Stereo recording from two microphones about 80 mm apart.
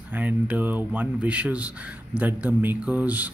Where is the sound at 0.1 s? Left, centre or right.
Right.